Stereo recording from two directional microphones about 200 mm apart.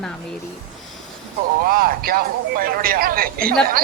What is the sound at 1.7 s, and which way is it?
Speech, 45° right (ahead or behind).